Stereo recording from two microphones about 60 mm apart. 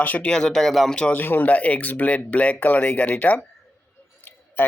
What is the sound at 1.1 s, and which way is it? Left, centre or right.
Speech, left.